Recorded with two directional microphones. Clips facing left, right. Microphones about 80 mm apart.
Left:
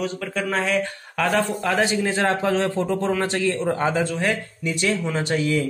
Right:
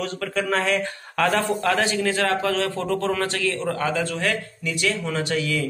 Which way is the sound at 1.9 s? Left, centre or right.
Left.